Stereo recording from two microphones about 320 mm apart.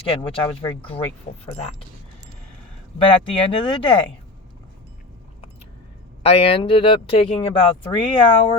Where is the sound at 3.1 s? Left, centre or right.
Centre.